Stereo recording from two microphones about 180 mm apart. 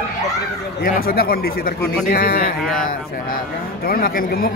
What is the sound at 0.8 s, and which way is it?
A man's voice, 55° left (ahead or behind).